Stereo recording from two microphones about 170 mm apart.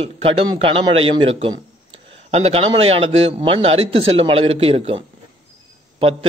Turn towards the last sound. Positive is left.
turn(degrees=-35)  # may be behind; listen again after turning